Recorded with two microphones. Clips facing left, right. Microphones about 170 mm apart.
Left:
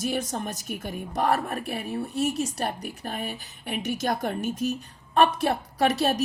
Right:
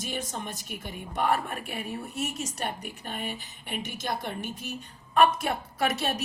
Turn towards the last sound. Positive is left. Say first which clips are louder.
# left 5 dB
turn(degrees=35)  # may be behind; listen again after turning